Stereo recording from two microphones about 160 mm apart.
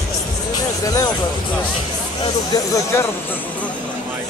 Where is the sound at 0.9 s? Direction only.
25° left (ahead or behind).